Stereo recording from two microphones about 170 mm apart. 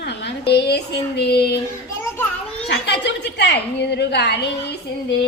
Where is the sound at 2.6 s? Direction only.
85° left.